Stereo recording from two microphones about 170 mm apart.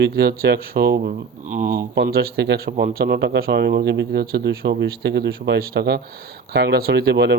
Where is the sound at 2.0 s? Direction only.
65° right (ahead or behind).